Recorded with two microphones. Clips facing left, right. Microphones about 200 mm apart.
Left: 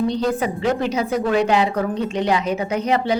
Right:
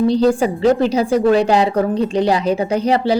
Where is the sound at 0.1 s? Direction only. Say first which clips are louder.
Right 7 dB; 30° right (ahead or behind).